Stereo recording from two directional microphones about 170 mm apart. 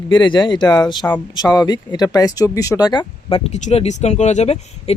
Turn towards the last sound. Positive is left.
turn(degrees=40)  # may be behind; listen again after turning